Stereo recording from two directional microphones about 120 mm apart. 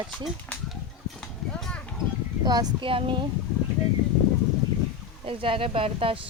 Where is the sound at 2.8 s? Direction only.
45° right (ahead or behind).